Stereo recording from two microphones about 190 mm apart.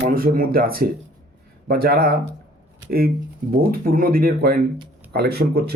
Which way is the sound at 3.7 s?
50° right (ahead or behind).